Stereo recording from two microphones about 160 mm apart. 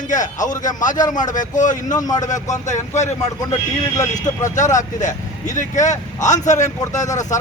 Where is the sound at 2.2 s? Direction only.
50° left (ahead or behind).